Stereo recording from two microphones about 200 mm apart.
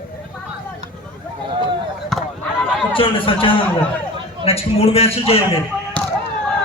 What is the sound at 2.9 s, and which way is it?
Speech, 25° left (ahead or behind).